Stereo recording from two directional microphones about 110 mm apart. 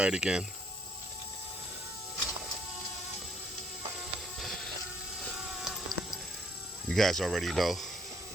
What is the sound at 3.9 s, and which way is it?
Music, centre (ahead or behind).